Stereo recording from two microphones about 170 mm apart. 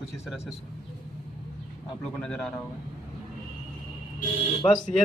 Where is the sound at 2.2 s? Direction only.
5° left (ahead or behind).